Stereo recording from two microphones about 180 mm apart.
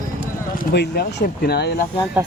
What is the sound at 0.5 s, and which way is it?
Speech, 65° left (ahead or behind).